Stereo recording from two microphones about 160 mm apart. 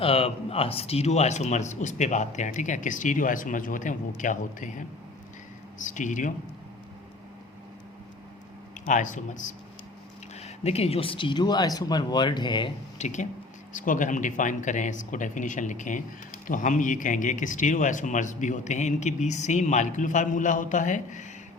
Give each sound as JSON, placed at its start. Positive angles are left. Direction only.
{"t": 0.0, "sound": "speech", "side_deg": 35}
{"t": 5.8, "sound": "speech", "side_deg": 50}
{"t": 8.7, "sound": "speech", "side_deg": 50}
{"t": 10.4, "sound": "speech", "side_deg": 40}
{"t": 13.0, "sound": "speech", "side_deg": 50}